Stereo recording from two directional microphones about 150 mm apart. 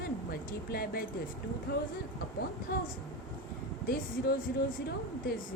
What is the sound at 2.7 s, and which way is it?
Speech, 90° left.